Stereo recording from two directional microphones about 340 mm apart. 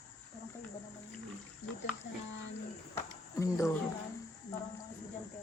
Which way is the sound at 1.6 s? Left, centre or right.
Left.